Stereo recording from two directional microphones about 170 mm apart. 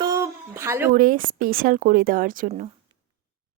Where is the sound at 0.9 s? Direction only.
55° right (ahead or behind).